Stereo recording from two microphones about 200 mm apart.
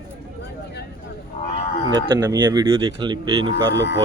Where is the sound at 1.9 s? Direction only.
20° right (ahead or behind).